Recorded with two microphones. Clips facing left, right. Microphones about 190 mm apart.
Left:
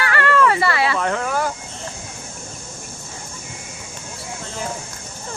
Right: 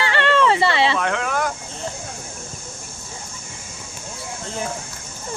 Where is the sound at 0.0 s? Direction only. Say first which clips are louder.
Even; 25° right (ahead or behind).